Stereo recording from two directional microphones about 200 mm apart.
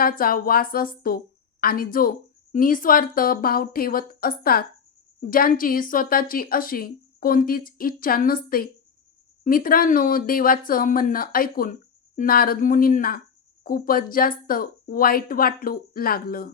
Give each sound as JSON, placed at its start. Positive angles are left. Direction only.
{"t": 0.0, "sound": "speech", "side_deg": 45}